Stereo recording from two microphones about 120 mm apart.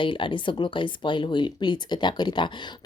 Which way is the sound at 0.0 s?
45° left (ahead or behind).